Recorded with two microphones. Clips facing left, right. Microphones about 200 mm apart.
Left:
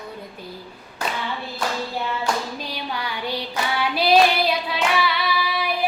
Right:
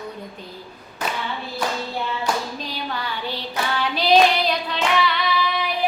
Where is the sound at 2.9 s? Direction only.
10° left (ahead or behind).